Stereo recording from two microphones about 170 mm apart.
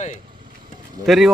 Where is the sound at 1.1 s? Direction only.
Centre (ahead or behind).